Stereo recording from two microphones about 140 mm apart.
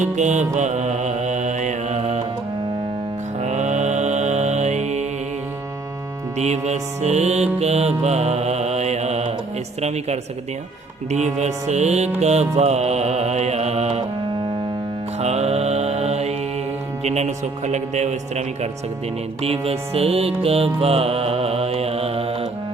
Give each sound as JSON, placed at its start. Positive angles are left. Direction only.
{"t": 0.0, "sound": "mantra", "side_deg": -60}
{"t": 3.4, "sound": "mantra", "side_deg": -55}
{"t": 6.3, "sound": "music", "side_deg": -50}
{"t": 15.2, "sound": "mantra", "side_deg": -50}
{"t": 17.0, "sound": "music", "side_deg": -50}